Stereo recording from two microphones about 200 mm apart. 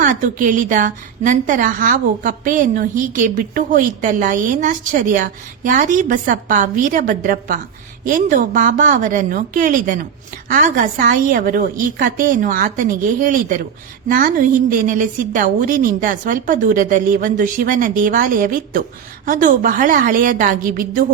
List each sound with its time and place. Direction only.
0.0 s a woman's voice: 40° right (ahead or behind)